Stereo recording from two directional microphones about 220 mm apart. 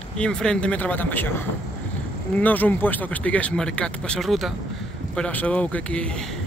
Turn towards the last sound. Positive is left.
turn(degrees=5)  # may be behind; listen again after turning